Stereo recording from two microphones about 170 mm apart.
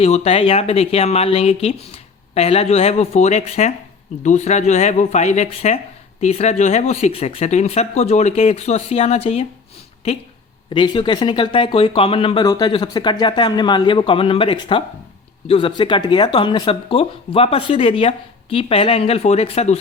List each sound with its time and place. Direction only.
0.0 s speech: 35° left (ahead or behind)
10.7 s speech: 30° left (ahead or behind)